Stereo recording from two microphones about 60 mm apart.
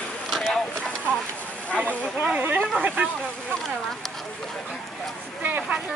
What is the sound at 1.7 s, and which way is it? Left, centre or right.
Speech, left.